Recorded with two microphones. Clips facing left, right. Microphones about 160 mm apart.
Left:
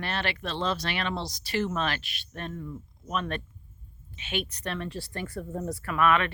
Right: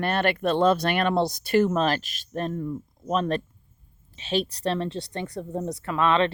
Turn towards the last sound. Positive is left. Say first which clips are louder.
# right 3 dB
turn(degrees=-25)  # may be behind; listen again after turning